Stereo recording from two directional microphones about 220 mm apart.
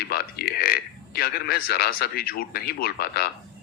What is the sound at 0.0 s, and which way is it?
A man's voice, 45° left (ahead or behind).